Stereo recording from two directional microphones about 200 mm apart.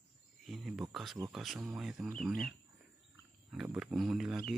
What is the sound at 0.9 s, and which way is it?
Speech, centre (ahead or behind).